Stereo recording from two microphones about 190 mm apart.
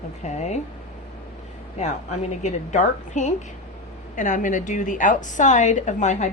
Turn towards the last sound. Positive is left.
turn(degrees=40)  # may be behind; listen again after turning